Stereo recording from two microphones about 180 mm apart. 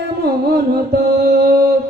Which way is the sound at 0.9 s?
60° right (ahead or behind).